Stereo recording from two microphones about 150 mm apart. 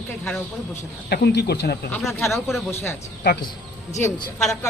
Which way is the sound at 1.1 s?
90° left.